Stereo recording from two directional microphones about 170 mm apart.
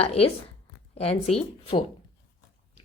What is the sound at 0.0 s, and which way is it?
Speech, 35° left (ahead or behind).